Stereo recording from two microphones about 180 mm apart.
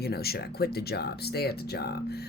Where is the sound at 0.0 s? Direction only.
60° left (ahead or behind).